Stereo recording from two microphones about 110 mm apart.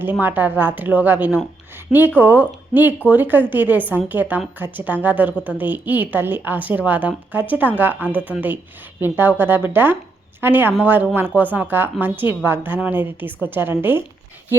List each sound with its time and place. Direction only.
0.0 s a woman's voice: 20° right (ahead or behind)